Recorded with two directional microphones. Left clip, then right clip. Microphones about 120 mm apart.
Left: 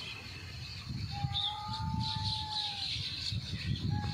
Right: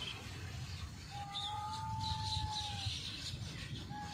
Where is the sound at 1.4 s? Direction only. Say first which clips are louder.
Left 8 dB; 45° right (ahead or behind).